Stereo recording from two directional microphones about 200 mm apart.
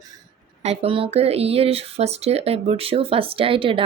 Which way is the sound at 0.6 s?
30° right (ahead or behind).